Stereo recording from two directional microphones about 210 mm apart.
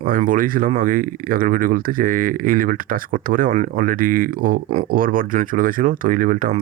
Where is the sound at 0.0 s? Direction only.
40° right (ahead or behind).